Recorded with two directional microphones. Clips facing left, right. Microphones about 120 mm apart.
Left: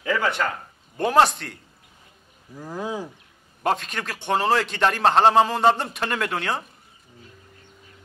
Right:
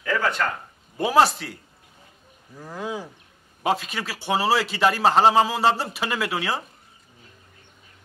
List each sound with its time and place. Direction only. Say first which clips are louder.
0.0 s speech: even; 20° left (ahead or behind)
0.9 s a man's voice: even; 5° right (ahead or behind)
2.5 s speech: left 1 dB; 5° left (ahead or behind)
3.6 s a man's voice: even; 5° right (ahead or behind)